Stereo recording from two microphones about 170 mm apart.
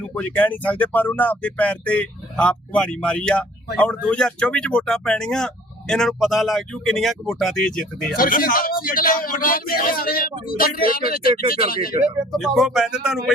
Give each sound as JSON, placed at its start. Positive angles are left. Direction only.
{"t": 0.1, "sound": "speech", "side_deg": 10}
{"t": 8.1, "sound": "speech", "side_deg": 55}
{"t": 12.3, "sound": "speech", "side_deg": 0}